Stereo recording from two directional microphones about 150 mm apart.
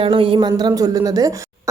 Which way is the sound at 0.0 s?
35° right (ahead or behind).